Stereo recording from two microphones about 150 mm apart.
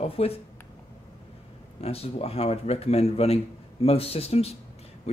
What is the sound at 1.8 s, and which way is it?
Speech, 40° left (ahead or behind).